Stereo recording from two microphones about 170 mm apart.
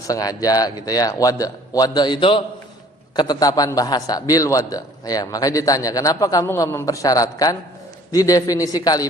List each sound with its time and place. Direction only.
0.1 s a man's voice: 20° left (ahead or behind)